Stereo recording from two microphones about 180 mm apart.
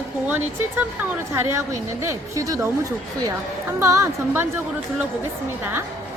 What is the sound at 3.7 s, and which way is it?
Speech, 15° right (ahead or behind).